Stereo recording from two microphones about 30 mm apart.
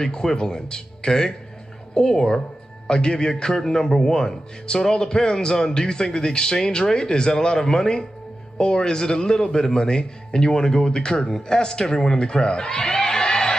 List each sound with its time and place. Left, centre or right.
0.0 s a man's voice: left